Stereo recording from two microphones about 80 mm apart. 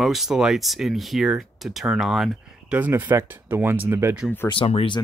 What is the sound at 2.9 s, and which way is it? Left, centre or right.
Speech, right.